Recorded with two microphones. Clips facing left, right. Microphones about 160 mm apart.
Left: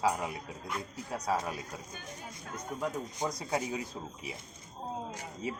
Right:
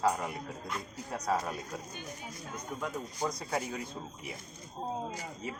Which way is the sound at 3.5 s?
20° left (ahead or behind).